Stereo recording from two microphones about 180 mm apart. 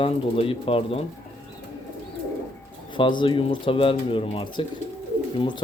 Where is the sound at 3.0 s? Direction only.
25° left (ahead or behind).